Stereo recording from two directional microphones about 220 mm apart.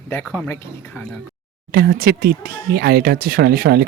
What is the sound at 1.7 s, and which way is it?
Speech, 45° right (ahead or behind).